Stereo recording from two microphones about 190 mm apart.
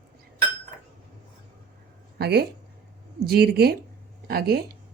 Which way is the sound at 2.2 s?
60° right (ahead or behind).